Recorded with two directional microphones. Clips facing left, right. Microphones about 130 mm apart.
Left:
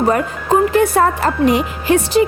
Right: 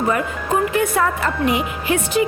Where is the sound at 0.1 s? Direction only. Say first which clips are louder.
Left 5 dB; 35° left (ahead or behind).